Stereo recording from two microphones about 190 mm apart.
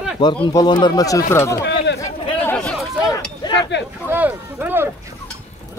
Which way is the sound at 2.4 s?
5° left (ahead or behind).